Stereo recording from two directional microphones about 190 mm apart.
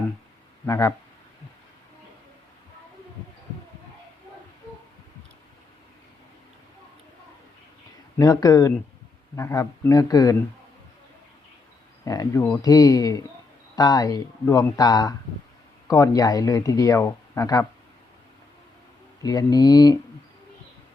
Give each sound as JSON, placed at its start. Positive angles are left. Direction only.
{"t": 0.6, "sound": "speech", "side_deg": 15}
{"t": 8.2, "sound": "speech", "side_deg": 20}
{"t": 12.0, "sound": "speech", "side_deg": 20}
{"t": 19.2, "sound": "speech", "side_deg": 20}